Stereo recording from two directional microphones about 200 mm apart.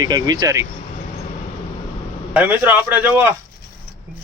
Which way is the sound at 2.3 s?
10° right (ahead or behind).